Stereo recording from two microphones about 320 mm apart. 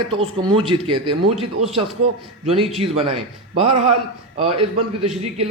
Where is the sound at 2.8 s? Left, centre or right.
Centre.